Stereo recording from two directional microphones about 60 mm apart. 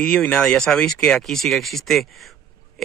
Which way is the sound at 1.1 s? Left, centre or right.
Centre.